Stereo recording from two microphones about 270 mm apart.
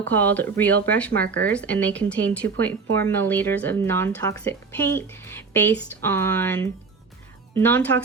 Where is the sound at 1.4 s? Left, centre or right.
Centre.